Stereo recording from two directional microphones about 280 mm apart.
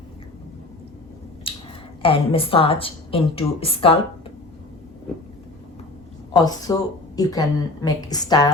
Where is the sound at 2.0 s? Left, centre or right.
Centre.